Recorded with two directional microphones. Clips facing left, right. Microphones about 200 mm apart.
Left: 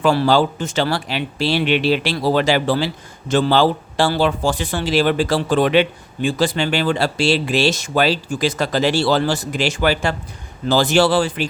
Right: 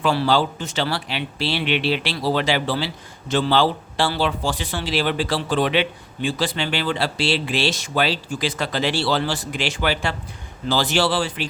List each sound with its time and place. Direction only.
0.0 s speech: 45° left (ahead or behind)